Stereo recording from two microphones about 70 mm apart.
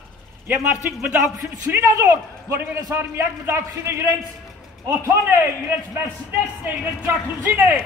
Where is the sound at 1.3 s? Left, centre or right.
Right.